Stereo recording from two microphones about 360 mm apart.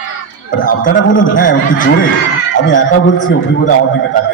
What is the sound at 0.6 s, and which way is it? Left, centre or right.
A man's voice, left.